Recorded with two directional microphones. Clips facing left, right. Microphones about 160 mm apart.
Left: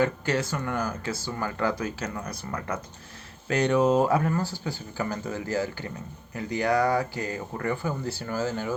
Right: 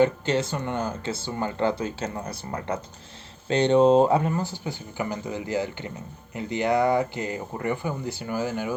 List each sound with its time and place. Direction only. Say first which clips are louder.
0.0 s speech: right 4 dB; 25° right (ahead or behind)